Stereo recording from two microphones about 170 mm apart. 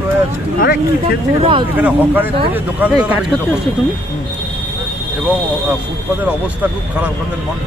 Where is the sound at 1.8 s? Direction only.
10° right (ahead or behind).